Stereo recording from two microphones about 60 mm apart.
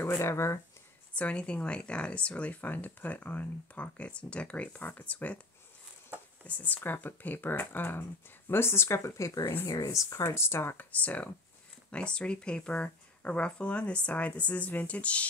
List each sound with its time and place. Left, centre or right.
0.2 s speech: left
1.1 s speech: left
6.4 s speech: left
10.2 s speech: left
10.9 s speech: left